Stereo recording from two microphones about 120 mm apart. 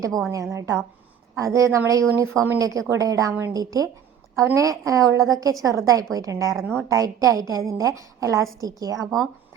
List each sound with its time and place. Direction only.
0.3 s a woman's voice: 25° right (ahead or behind)